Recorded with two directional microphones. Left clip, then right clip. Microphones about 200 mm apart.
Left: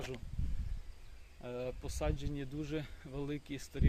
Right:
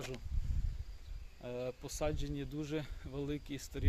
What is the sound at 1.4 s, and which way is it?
Speech, 20° right (ahead or behind).